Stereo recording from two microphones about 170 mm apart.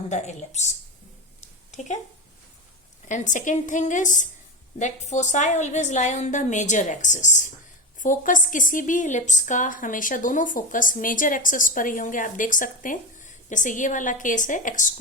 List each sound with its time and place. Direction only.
0.1 s a woman's voice: 45° left (ahead or behind)
3.1 s a woman's voice: 45° left (ahead or behind)